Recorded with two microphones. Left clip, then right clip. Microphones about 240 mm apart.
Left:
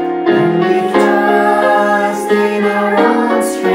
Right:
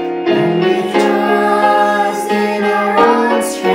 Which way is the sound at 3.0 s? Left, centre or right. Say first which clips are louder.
Right 2 dB; centre.